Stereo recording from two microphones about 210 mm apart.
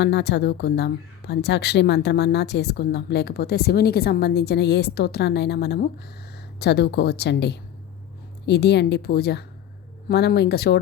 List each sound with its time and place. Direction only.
0.0 s speech: 55° left (ahead or behind)